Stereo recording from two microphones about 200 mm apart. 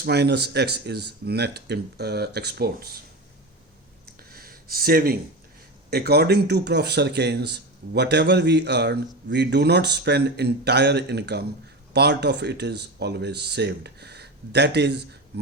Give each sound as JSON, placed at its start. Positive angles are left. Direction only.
{"t": 0.0, "sound": "speech", "side_deg": -55}
{"t": 4.2, "sound": "a sound", "side_deg": -50}
{"t": 5.9, "sound": "speech", "side_deg": -55}